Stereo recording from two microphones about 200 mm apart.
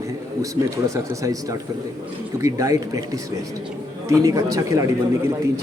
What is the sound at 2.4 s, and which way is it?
Speech, 15° right (ahead or behind).